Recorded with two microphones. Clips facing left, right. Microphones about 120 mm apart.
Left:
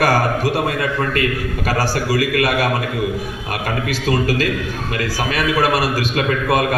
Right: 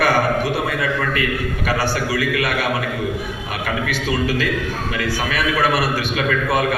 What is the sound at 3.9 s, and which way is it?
A man's voice, 35° left (ahead or behind).